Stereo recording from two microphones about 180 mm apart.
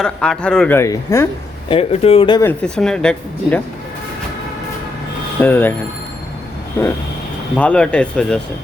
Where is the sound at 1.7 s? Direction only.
30° left (ahead or behind).